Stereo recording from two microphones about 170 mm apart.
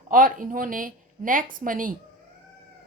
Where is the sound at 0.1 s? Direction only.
55° right (ahead or behind).